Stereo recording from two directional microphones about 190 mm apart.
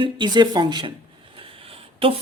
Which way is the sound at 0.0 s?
25° right (ahead or behind).